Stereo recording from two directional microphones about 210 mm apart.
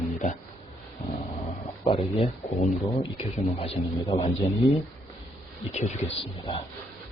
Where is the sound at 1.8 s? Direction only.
25° left (ahead or behind).